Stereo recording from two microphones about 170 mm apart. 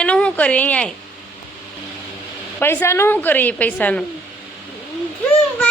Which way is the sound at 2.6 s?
15° left (ahead or behind).